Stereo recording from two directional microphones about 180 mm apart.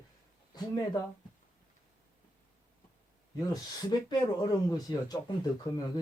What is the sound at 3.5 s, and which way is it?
Speech, 20° left (ahead or behind).